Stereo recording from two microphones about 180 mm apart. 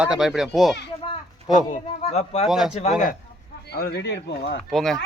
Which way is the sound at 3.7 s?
60° left (ahead or behind).